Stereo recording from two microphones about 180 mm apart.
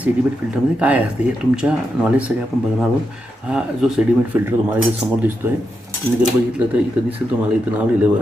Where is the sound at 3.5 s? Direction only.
5° right (ahead or behind).